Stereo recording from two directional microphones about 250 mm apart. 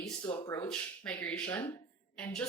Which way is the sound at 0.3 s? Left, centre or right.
Centre.